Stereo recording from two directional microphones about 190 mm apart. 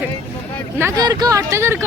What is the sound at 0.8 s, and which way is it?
Speech, 15° right (ahead or behind).